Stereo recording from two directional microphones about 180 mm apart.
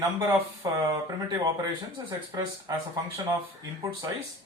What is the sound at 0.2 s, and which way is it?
Speech, 20° right (ahead or behind).